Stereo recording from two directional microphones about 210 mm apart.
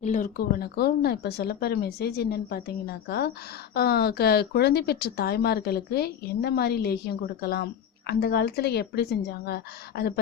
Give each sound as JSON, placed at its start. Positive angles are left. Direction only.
{"t": 0.0, "sound": "speech", "side_deg": 40}